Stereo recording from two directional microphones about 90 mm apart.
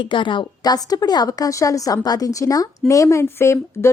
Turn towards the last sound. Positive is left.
turn(degrees=30)  # may be behind; listen again after turning